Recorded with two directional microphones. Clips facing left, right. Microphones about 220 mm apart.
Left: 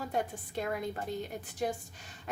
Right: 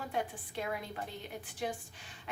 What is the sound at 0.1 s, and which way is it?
A woman's voice, 45° left (ahead or behind).